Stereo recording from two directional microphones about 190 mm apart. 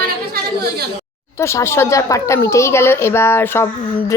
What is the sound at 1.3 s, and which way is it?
Speech, 15° left (ahead or behind).